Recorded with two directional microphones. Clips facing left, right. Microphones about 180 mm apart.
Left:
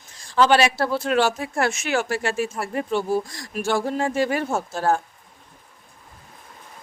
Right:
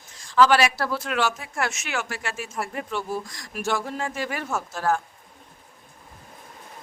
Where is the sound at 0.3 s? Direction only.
25° left (ahead or behind).